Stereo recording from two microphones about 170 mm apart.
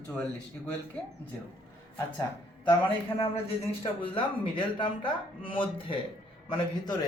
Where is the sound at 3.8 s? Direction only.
30° left (ahead or behind).